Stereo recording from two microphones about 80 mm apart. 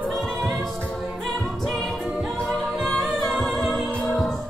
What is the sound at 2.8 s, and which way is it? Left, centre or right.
Music, centre.